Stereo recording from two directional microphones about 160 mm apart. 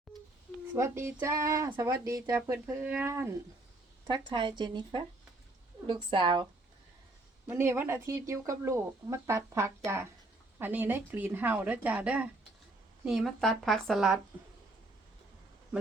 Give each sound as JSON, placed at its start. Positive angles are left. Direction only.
{"t": 0.8, "sound": "speech", "side_deg": -15}
{"t": 4.0, "sound": "speech", "side_deg": -30}
{"t": 7.4, "sound": "a woman's voice", "side_deg": -15}